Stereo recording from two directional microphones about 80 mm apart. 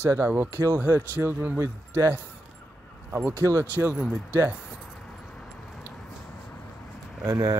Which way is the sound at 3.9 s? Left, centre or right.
Centre.